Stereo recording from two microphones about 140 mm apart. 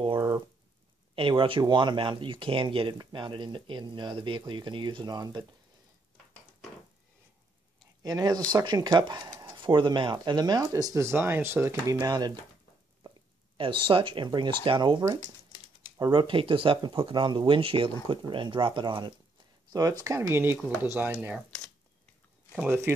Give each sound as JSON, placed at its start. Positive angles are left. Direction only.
{"t": 0.0, "sound": "a sound", "side_deg": -30}
{"t": 1.1, "sound": "speech", "side_deg": -40}
{"t": 8.0, "sound": "speech", "side_deg": -25}
{"t": 13.6, "sound": "speech", "side_deg": -35}
{"t": 22.6, "sound": "speech", "side_deg": -15}